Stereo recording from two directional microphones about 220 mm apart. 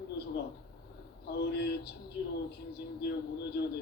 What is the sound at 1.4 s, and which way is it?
Speech, 45° left (ahead or behind).